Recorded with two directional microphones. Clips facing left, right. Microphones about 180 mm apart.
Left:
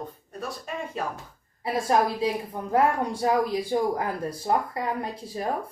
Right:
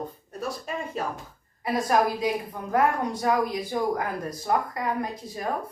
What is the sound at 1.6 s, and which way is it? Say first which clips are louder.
A woman's voice: even; 30° left (ahead or behind).